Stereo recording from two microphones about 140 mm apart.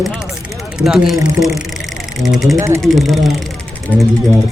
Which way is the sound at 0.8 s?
5° right (ahead or behind).